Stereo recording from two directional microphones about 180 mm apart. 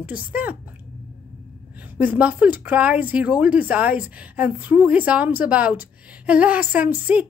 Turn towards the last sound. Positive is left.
turn(degrees=-10)  # may be behind; listen again after turning